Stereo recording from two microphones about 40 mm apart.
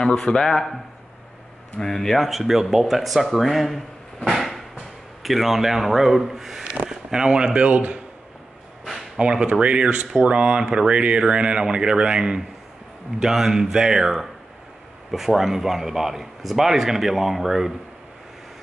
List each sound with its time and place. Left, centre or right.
0.0 s a man's voice: left
0.5 s speech: centre
1.8 s speech: centre
2.2 s speech: centre; by 8.0 s right
8.8 s a sound: centre
9.2 s speech: right
13.2 s speech: centre